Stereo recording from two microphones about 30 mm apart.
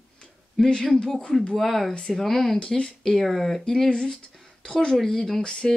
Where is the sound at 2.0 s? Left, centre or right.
Centre.